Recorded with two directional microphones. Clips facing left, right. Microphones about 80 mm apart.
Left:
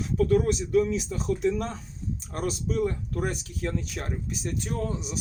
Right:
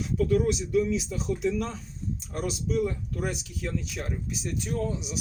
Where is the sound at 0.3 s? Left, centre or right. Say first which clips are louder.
Left 1 dB; left.